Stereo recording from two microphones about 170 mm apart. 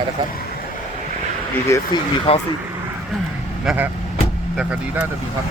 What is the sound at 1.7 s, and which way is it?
Speech, 25° left (ahead or behind).